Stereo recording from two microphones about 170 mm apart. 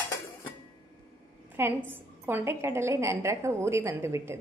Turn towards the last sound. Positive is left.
turn(degrees=-15)  # may be behind; listen again after turning